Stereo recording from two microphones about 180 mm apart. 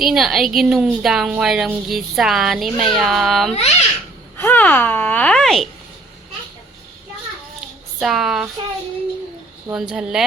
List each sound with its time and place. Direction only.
0.0 s a woman's voice: centre (ahead or behind)
3.5 s a child's voice: 35° left (ahead or behind)
4.4 s speech: 10° left (ahead or behind)
7.9 s a woman's voice: centre (ahead or behind)
9.7 s a woman's voice: 5° right (ahead or behind)